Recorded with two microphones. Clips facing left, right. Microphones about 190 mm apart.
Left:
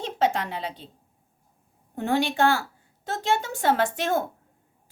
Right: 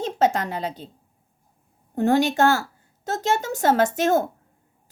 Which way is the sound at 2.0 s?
45° right (ahead or behind).